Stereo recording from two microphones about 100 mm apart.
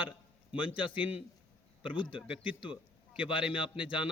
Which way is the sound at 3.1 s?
60° left (ahead or behind).